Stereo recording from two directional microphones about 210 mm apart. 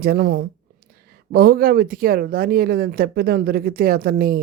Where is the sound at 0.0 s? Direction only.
45° right (ahead or behind).